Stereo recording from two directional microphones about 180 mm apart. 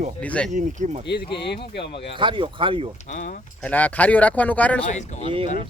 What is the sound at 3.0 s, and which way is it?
Speech, 45° left (ahead or behind).